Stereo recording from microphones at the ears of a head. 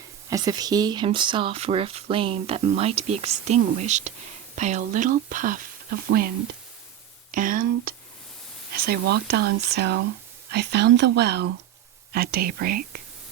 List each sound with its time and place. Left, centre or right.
0.3 s speech: right